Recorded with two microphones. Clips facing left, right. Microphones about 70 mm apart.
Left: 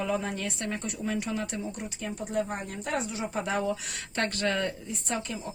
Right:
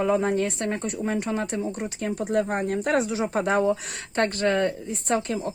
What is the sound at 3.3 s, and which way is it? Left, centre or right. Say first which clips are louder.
Speech: right 7 dB; right.